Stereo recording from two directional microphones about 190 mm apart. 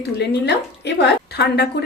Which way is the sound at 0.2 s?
60° left (ahead or behind).